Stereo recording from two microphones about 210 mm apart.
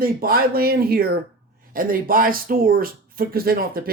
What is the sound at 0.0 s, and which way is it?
Speech, 45° right (ahead or behind).